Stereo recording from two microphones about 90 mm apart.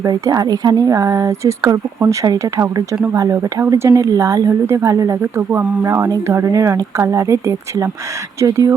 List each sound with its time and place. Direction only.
0.1 s speech: 50° right (ahead or behind)